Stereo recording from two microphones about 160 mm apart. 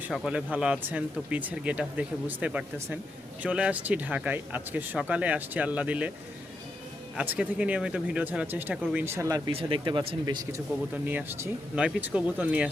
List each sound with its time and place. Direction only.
0.1 s speech: 5° right (ahead or behind)
7.2 s speech: 5° right (ahead or behind)
9.5 s speech: 35° right (ahead or behind)
10.9 s speech: 10° right (ahead or behind)